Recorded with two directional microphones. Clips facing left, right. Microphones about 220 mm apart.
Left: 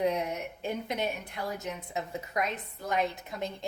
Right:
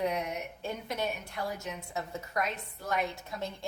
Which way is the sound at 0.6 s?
15° left (ahead or behind).